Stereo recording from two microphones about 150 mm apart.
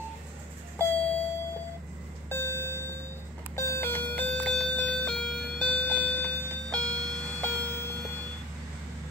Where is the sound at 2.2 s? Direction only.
15° left (ahead or behind).